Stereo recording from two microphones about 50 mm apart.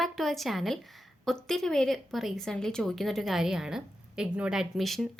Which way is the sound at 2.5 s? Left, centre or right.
Centre.